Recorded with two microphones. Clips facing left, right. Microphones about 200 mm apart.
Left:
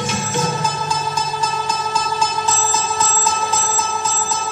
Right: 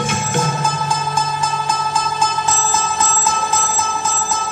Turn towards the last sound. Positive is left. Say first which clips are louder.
# right 1 dB
turn(degrees=-50)  # may be behind; listen again after turning